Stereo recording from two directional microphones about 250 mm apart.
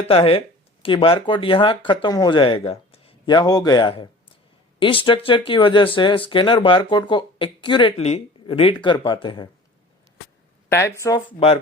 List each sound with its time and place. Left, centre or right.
0.1 s speech: left
10.7 s speech: centre
11.3 s speech: left